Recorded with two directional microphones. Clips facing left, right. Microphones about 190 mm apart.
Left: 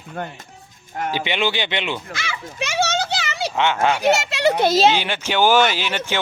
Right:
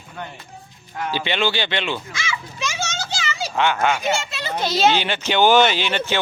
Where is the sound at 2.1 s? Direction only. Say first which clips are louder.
Even; 60° left (ahead or behind).